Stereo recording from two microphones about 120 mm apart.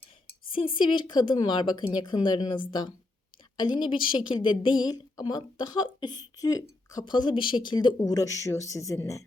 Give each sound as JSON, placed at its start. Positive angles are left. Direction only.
{"t": 0.5, "sound": "a woman's voice", "side_deg": 45}